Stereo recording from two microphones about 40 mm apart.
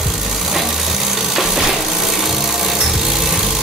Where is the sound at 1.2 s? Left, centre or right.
Centre.